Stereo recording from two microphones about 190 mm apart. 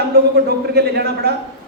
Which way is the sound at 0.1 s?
55° right (ahead or behind).